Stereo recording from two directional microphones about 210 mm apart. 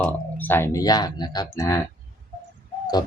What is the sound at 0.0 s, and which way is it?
Speech, 10° left (ahead or behind).